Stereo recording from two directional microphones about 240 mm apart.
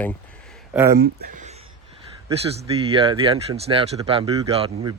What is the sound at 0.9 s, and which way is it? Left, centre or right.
Speech, right.